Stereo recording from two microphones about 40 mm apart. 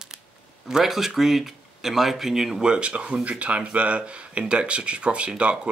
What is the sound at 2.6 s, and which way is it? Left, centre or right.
Speech, right.